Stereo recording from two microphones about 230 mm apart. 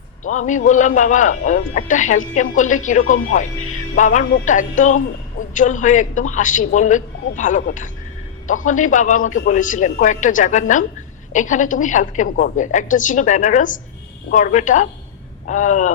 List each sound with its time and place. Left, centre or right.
0.3 s a man's voice: left